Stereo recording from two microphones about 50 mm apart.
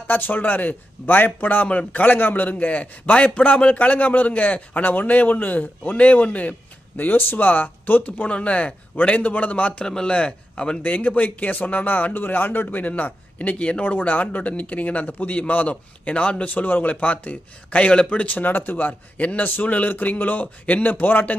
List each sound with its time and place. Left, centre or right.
0.1 s a man's voice: left
9.8 s a man's voice: centre; by 18.9 s left
19.1 s a man's voice: left
21.0 s a man's voice: left